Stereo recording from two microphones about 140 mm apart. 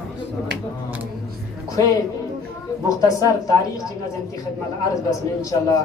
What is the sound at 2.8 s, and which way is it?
Speech, 25° left (ahead or behind).